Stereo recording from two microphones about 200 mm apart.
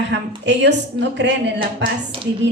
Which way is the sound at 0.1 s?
60° right (ahead or behind).